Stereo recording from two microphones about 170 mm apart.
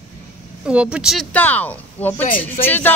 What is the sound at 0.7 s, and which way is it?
Speech, 5° right (ahead or behind).